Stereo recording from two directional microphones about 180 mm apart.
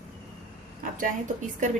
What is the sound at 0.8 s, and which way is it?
Speech, 50° right (ahead or behind).